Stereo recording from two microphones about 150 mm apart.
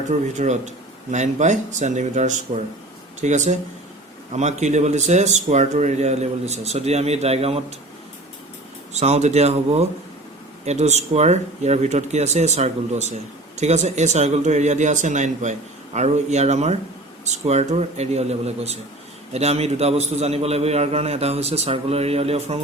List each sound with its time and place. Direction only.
0.1 s speech: 50° right (ahead or behind)
8.9 s speech: 45° right (ahead or behind)